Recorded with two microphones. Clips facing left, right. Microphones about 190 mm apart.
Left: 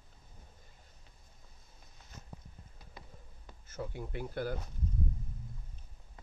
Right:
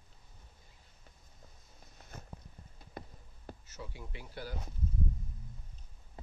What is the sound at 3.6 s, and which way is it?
Speech, 55° left (ahead or behind).